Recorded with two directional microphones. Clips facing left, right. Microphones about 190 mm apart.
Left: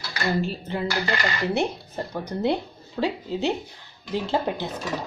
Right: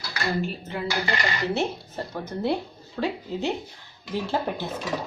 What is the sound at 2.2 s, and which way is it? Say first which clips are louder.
Speech: left 2 dB; 15° left (ahead or behind).